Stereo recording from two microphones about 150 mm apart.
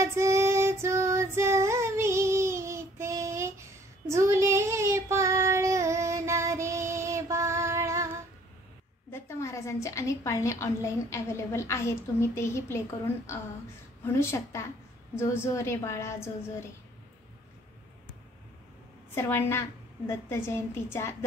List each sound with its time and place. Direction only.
0.0 s female singing: 20° right (ahead or behind)
4.1 s child singing: 20° right (ahead or behind)
9.1 s a woman's voice: 20° left (ahead or behind)
19.1 s a woman's voice: 15° left (ahead or behind)